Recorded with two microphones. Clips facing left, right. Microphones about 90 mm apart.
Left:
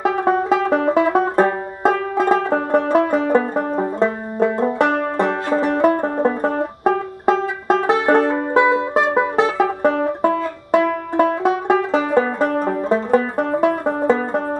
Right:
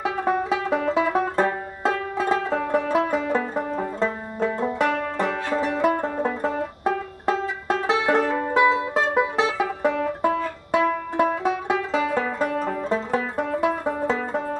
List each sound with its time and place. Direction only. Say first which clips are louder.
0.0 s music: left 6 dB; 50° left (ahead or behind)
4.7 s banjo: left 5 dB; 55° left (ahead or behind)
5.6 s music: left 5 dB; 50° left (ahead or behind)
6.8 s music: left 6 dB; 50° left (ahead or behind)
11.1 s banjo: left 7 dB; 50° left (ahead or behind)
11.9 s music: left 6 dB; 45° left (ahead or behind)